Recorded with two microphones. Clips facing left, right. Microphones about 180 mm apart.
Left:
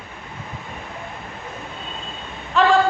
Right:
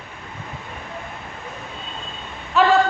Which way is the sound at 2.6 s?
5° right (ahead or behind).